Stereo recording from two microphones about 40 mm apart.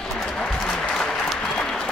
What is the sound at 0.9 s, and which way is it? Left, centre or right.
Applause, centre.